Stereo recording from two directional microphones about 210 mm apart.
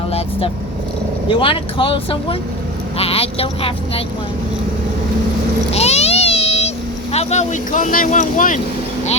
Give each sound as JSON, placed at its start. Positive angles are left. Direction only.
{"t": 0.1, "sound": "vehicle", "side_deg": 25}
{"t": 1.3, "sound": "speech", "side_deg": 25}
{"t": 5.7, "sound": "a sound", "side_deg": 30}
{"t": 7.1, "sound": "speech", "side_deg": 30}